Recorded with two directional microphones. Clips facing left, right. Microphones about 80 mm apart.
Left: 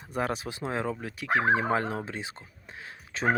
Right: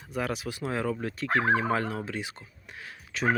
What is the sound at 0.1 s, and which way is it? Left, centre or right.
Speech, left.